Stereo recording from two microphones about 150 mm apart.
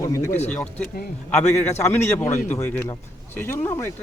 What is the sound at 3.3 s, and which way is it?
Speech, 15° left (ahead or behind).